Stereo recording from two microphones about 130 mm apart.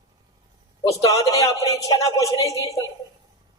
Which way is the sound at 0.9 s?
25° left (ahead or behind).